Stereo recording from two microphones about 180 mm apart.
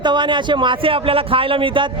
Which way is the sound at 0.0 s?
25° right (ahead or behind).